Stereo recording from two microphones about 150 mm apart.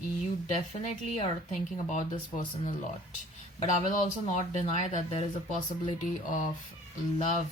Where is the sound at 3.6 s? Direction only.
55° left (ahead or behind).